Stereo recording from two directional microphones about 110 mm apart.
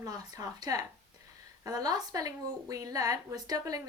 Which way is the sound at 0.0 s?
35° right (ahead or behind).